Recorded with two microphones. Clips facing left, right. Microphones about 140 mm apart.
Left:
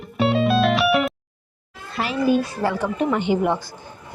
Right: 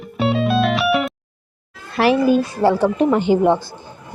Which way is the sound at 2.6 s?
30° right (ahead or behind).